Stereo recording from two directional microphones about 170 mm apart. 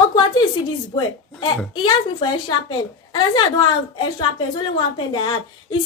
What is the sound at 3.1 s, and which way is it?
A woman's voice, 25° left (ahead or behind).